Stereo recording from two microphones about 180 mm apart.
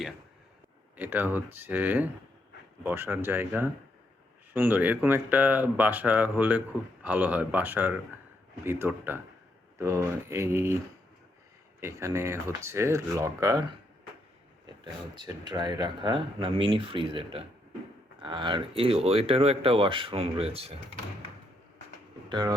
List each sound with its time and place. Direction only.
0.9 s speech: 10° right (ahead or behind)
11.8 s speech: 15° right (ahead or behind)
15.1 s speech: 25° right (ahead or behind)
22.3 s speech: 25° right (ahead or behind)